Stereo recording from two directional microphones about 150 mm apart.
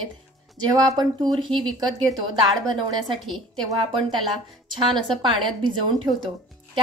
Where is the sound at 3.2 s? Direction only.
Centre (ahead or behind).